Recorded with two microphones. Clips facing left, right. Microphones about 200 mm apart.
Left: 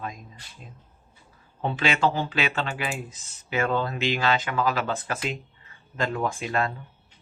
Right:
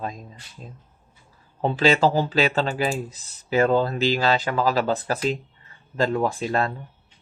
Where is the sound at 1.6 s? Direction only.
35° right (ahead or behind).